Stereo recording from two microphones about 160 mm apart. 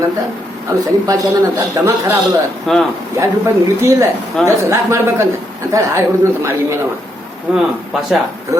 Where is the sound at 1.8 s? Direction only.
20° right (ahead or behind).